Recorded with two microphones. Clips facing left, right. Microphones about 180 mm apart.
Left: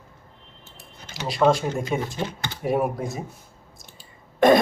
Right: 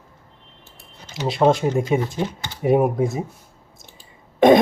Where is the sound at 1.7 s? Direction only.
Centre (ahead or behind).